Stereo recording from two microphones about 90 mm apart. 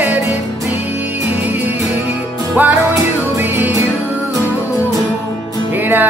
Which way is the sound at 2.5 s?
20° right (ahead or behind).